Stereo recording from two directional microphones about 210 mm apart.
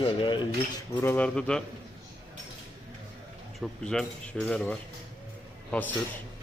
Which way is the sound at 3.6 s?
5° left (ahead or behind).